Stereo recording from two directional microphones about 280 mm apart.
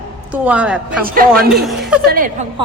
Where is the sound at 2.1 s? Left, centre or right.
Right.